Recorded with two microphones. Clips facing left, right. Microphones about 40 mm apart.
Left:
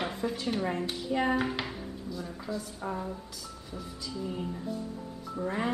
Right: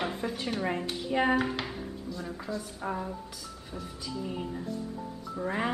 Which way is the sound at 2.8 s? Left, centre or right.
Centre.